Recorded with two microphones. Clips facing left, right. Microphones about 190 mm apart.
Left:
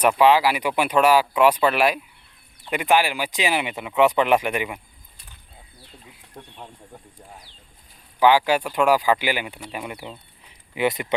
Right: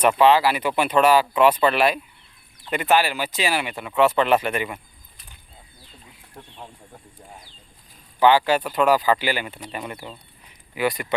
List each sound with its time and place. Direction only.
0.0 s speech: 10° left (ahead or behind)
8.2 s speech: 10° left (ahead or behind)